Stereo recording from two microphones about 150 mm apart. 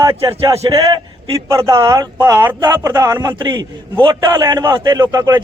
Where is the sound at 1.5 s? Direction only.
20° right (ahead or behind).